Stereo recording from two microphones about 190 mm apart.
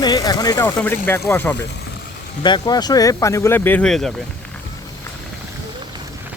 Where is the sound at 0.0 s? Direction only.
20° left (ahead or behind).